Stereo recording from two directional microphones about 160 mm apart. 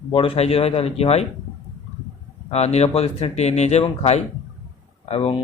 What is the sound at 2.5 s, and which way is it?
Speech, 40° left (ahead or behind).